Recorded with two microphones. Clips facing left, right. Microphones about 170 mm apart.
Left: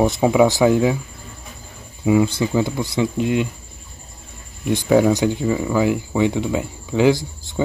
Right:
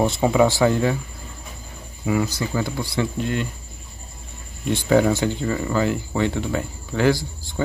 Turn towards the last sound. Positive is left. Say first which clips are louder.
# left 4 dB
turn(degrees=15)  # may be behind; listen again after turning